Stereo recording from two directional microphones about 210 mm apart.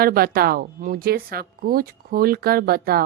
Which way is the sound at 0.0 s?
45° right (ahead or behind).